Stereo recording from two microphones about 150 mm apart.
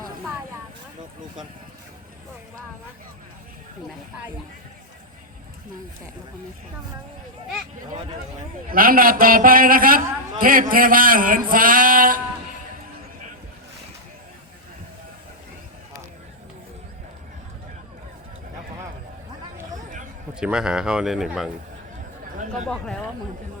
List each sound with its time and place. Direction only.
8.7 s a man's voice: 70° right (ahead or behind)
20.3 s a man's voice: 5° right (ahead or behind)
22.7 s a man's voice: 5° left (ahead or behind)